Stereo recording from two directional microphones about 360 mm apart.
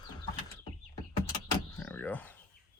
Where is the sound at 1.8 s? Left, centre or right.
Centre.